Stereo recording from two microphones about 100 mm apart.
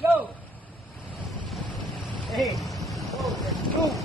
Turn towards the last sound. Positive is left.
turn(degrees=0)  # may be behind; listen again after turning